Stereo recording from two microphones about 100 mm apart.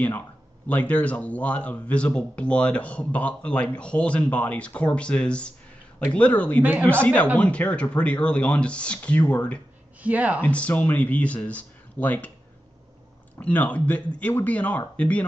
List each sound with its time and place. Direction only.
0.7 s speech: 15° left (ahead or behind)
10.0 s speech: 15° right (ahead or behind)
10.4 s speech: 15° left (ahead or behind)
13.4 s speech: 15° left (ahead or behind)